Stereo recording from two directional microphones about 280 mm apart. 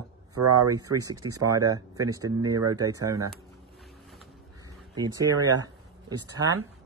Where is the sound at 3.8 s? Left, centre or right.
Centre.